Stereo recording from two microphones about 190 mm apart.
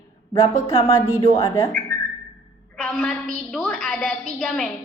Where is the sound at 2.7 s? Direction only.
5° left (ahead or behind).